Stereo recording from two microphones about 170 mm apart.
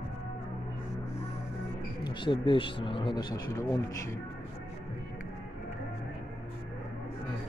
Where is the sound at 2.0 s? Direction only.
30° left (ahead or behind).